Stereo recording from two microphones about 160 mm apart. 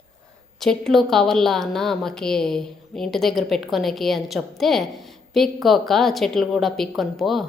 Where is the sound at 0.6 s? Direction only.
5° left (ahead or behind).